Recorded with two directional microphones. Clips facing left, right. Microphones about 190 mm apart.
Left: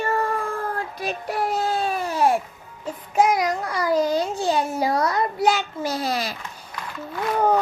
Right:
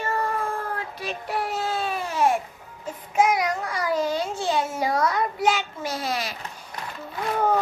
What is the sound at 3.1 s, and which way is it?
A child's voice, 35° left (ahead or behind).